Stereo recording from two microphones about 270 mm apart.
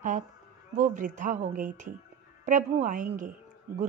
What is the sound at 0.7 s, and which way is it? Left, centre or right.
A woman's voice, right.